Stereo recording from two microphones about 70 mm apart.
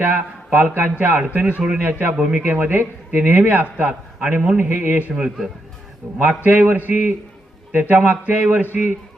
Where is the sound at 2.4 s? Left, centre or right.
Right.